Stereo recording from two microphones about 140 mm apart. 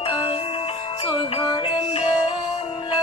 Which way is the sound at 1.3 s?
35° left (ahead or behind).